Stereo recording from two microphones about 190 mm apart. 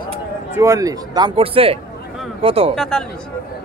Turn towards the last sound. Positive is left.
turn(degrees=0)  # may be behind; listen again after turning